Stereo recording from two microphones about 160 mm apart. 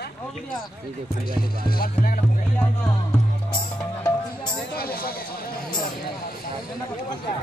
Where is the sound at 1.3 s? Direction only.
65° left (ahead or behind).